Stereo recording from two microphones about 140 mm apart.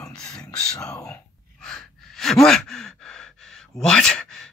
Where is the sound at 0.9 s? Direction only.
20° left (ahead or behind).